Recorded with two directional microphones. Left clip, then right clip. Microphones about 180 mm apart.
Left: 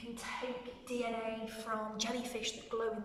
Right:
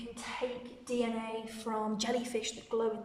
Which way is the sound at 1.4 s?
45° right (ahead or behind).